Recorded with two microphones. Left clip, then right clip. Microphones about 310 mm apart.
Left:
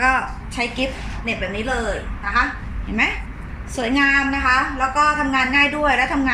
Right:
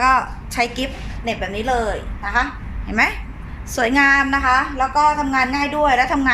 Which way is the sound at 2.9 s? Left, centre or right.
Right.